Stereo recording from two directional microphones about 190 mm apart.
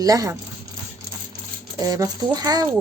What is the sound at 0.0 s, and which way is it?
Speech, 20° right (ahead or behind).